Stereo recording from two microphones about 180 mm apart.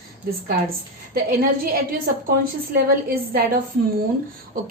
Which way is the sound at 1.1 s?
55° right (ahead or behind).